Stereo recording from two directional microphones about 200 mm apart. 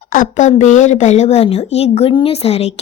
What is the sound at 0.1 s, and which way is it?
A woman's voice, 40° left (ahead or behind).